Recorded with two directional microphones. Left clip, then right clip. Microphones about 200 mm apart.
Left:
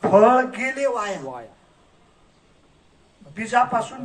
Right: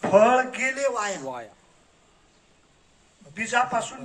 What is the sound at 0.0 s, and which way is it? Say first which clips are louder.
Speech: left 3 dB; 15° right (ahead or behind).